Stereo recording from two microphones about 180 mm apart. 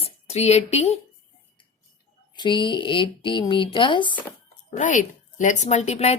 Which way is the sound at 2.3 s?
25° left (ahead or behind).